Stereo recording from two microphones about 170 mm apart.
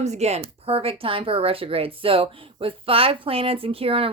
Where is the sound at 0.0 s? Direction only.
40° right (ahead or behind).